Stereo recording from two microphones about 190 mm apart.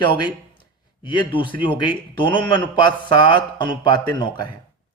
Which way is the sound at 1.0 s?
25° left (ahead or behind).